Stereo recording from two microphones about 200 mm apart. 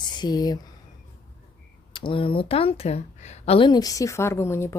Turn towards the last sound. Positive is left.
turn(degrees=15)  # may be behind; listen again after turning